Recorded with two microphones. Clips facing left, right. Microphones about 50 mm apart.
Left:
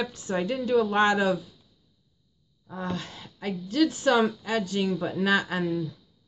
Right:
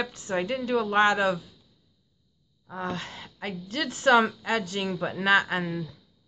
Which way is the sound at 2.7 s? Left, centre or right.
Right.